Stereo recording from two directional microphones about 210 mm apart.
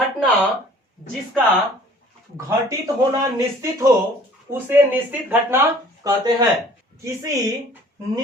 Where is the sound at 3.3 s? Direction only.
15° right (ahead or behind).